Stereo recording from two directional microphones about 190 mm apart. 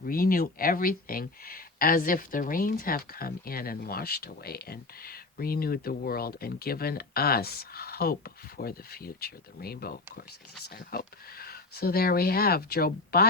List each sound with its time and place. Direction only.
0.0 s speech: 50° left (ahead or behind)